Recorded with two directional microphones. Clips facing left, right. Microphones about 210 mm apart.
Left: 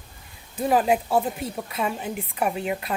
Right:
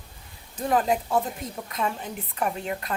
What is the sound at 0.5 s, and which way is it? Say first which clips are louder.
A woman's voice: left 3 dB; 10° left (ahead or behind).